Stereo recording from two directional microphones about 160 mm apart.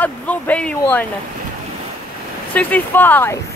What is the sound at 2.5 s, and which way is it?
Speech, 10° left (ahead or behind).